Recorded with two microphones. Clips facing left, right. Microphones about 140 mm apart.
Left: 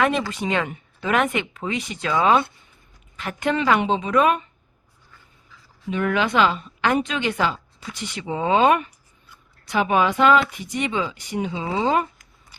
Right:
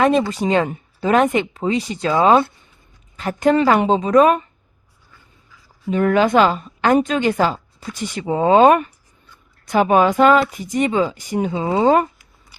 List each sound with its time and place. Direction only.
0.3 s speech: 35° right (ahead or behind)
5.9 s a woman's voice: 40° right (ahead or behind)